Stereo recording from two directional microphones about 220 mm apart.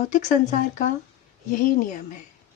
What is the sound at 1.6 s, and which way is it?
Speech, 35° left (ahead or behind).